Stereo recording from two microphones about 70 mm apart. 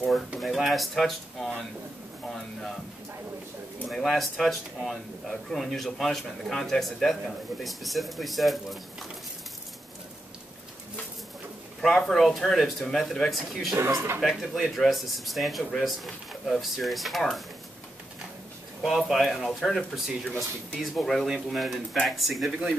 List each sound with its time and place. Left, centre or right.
0.4 s speech: centre
2.2 s a sound: centre
3.8 s speech: centre
11.8 s speech: centre
13.7 s speech: right
14.2 s speech: centre
18.9 s speech: centre